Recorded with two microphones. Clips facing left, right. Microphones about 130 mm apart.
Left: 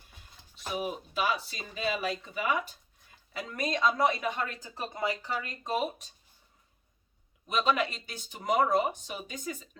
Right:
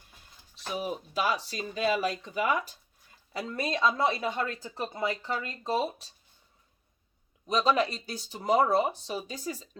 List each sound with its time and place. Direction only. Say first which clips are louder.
0.9 s a woman's voice: right 2 dB; 40° right (ahead or behind)
7.4 s a woman's voice: right 3 dB; 35° right (ahead or behind)